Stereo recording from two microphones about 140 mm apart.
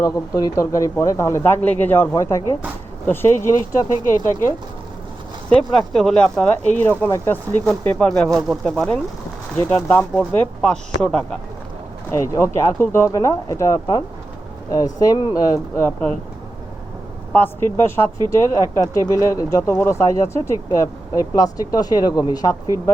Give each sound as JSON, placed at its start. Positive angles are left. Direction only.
{"t": 0.0, "sound": "speech", "side_deg": 25}
{"t": 5.5, "sound": "speech", "side_deg": 5}
{"t": 12.1, "sound": "speech", "side_deg": 20}
{"t": 17.3, "sound": "speech", "side_deg": 15}
{"t": 18.3, "sound": "speech", "side_deg": -25}
{"t": 18.9, "sound": "speech", "side_deg": 25}